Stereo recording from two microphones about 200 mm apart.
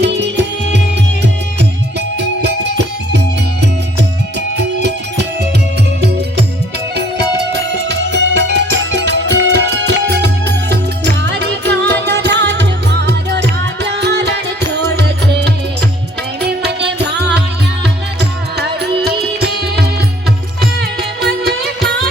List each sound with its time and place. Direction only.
0.0 s music: 60° right (ahead or behind)
2.1 s music: 60° right (ahead or behind)
4.4 s music: 60° right (ahead or behind)
7.5 s music: 60° right (ahead or behind)
21.8 s music: centre (ahead or behind)